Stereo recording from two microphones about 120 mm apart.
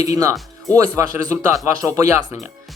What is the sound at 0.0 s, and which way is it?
Speech, 30° right (ahead or behind).